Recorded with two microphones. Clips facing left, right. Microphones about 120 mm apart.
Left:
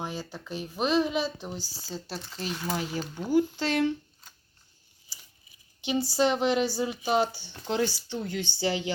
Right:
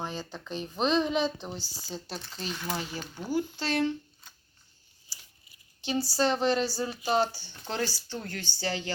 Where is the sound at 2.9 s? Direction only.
20° left (ahead or behind).